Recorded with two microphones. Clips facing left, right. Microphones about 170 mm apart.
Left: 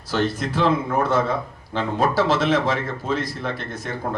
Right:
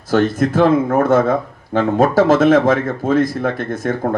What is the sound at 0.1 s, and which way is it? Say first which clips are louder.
Speech: right 8 dB; 50° right (ahead or behind).